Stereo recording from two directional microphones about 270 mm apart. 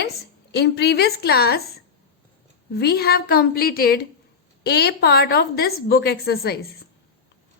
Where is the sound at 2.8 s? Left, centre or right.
Left.